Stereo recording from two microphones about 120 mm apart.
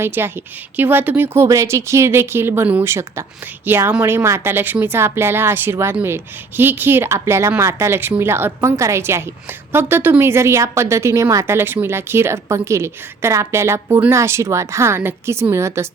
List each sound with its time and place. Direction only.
0.0 s a woman's voice: 20° right (ahead or behind)